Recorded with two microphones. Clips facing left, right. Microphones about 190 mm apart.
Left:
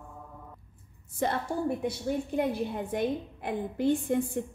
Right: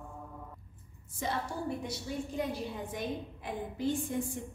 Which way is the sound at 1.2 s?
55° left (ahead or behind).